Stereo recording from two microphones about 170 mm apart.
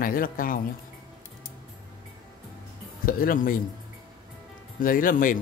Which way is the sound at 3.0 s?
55° left (ahead or behind).